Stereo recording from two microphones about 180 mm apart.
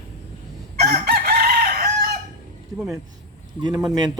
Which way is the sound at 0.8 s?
60° right (ahead or behind).